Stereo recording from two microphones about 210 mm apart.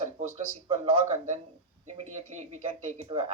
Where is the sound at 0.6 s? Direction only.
30° right (ahead or behind).